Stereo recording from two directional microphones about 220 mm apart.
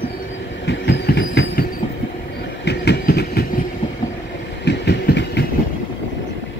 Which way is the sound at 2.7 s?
50° left (ahead or behind).